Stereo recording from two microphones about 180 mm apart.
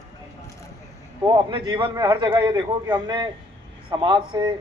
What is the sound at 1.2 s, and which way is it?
A man's voice, 25° right (ahead or behind).